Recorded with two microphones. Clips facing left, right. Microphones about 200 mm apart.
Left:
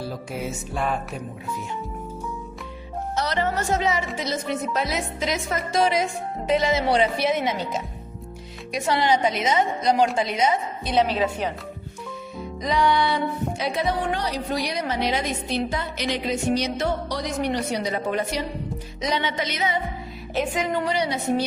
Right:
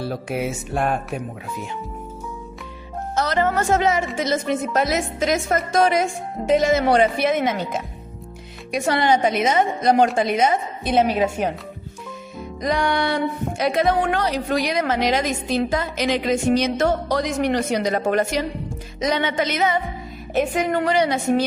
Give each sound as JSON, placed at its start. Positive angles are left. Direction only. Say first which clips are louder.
{"t": 0.0, "sound": "music", "louder": "right 5 dB", "side_deg": -70}
{"t": 3.2, "sound": "speech", "louder": "right 5 dB", "side_deg": -50}
{"t": 12.6, "sound": "speech", "louder": "even", "side_deg": -50}
{"t": 14.5, "sound": "a woman's voice", "louder": "right 5 dB", "side_deg": -90}
{"t": 16.7, "sound": "speech", "louder": "right 5 dB", "side_deg": -50}
{"t": 17.2, "sound": "a woman's voice", "louder": "right 5 dB", "side_deg": -90}
{"t": 18.9, "sound": "speech", "louder": "right 5 dB", "side_deg": -50}
{"t": 20.3, "sound": "a woman's voice", "louder": "right 4 dB", "side_deg": -60}